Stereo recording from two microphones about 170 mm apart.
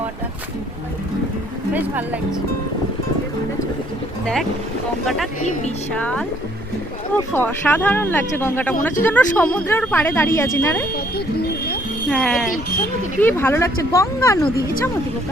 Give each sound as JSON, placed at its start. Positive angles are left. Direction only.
{"t": 5.0, "sound": "speech", "side_deg": 0}
{"t": 12.0, "sound": "speech", "side_deg": 0}